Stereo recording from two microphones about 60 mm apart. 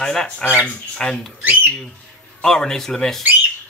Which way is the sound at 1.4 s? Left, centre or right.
Right.